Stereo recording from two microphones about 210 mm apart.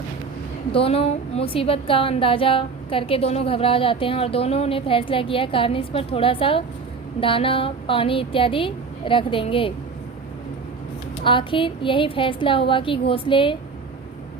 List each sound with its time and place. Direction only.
0.7 s a woman's voice: 25° left (ahead or behind)
11.2 s a woman's voice: 25° left (ahead or behind)